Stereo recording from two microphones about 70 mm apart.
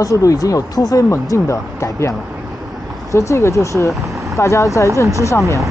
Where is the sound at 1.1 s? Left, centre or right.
Left.